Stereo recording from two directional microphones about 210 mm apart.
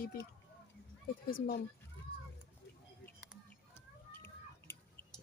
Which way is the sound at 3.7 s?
10° left (ahead or behind).